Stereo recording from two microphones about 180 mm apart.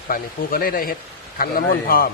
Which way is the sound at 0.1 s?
50° left (ahead or behind).